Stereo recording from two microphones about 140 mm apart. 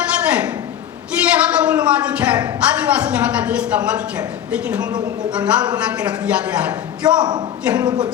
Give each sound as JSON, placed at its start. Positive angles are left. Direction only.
{"t": 0.3, "sound": "a sound", "side_deg": -10}
{"t": 1.2, "sound": "a woman's voice", "side_deg": -10}
{"t": 7.2, "sound": "speech", "side_deg": -30}